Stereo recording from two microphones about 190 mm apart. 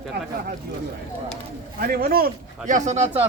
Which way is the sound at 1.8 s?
50° right (ahead or behind).